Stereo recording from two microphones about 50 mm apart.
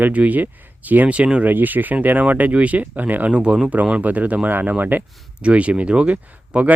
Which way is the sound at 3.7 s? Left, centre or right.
Right.